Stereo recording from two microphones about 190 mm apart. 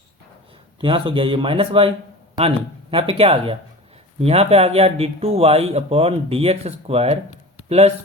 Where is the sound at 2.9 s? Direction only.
30° right (ahead or behind).